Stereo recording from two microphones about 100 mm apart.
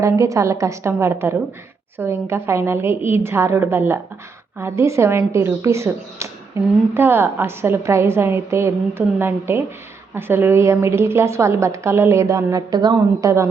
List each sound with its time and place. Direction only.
0.0 s a woman's voice: 30° right (ahead or behind)